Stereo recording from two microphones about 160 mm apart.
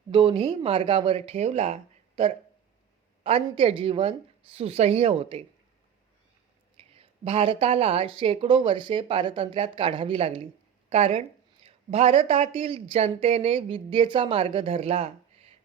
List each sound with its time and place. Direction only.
0.1 s speech: 35° right (ahead or behind)
6.7 s a woman's voice: 40° right (ahead or behind)